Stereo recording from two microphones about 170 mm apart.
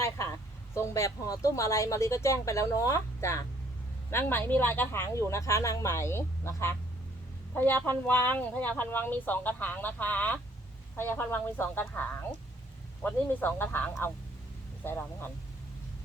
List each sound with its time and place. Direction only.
0.7 s a woman's voice: 15° left (ahead or behind)